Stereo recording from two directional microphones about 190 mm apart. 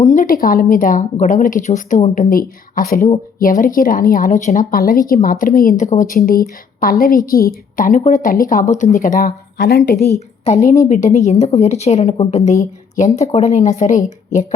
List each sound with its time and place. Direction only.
0.0 s speech: 40° left (ahead or behind); by 10.2 s 60° left (ahead or behind)
10.2 s a woman's voice: 35° left (ahead or behind)